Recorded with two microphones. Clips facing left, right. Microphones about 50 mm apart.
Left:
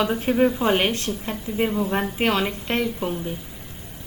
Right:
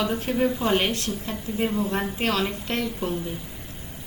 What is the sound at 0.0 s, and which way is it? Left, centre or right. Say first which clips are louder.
A woman's voice: left 4 dB; left.